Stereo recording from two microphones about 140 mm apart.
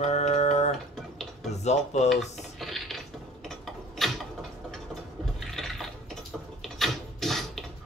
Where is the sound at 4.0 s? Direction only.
Centre (ahead or behind).